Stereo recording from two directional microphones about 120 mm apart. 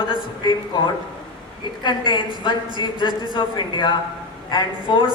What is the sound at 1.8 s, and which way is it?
A woman's voice, 40° left (ahead or behind).